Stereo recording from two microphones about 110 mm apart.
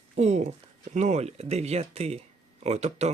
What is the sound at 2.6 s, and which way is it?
Speech, 85° right.